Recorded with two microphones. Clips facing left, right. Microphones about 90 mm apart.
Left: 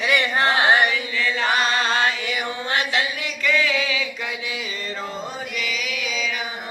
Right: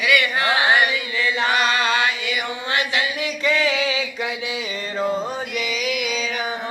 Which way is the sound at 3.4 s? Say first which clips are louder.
Right 1 dB; 25° right (ahead or behind).